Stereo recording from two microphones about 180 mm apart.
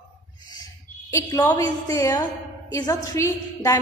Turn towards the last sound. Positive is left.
turn(degrees=15)  # may be behind; listen again after turning